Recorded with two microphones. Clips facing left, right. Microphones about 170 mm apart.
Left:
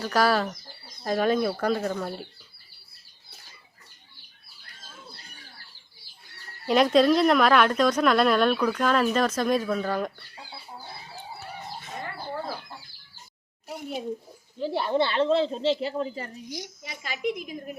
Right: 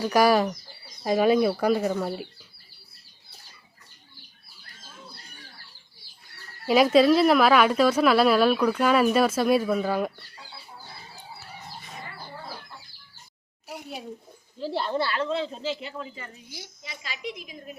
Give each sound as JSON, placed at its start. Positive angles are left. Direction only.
{"t": 0.0, "sound": "a woman's voice", "side_deg": -15}
{"t": 6.7, "sound": "a woman's voice", "side_deg": -5}
{"t": 14.6, "sound": "speech", "side_deg": 0}
{"t": 14.9, "sound": "a woman's voice", "side_deg": 25}